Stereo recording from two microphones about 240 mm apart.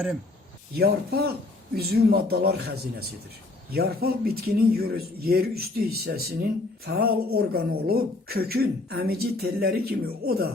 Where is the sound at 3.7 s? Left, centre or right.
Right.